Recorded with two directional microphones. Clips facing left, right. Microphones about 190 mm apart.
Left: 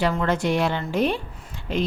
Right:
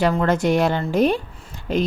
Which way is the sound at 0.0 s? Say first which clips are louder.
Right 4 dB; 45° right (ahead or behind).